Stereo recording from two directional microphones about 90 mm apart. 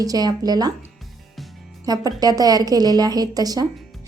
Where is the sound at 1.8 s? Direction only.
45° right (ahead or behind).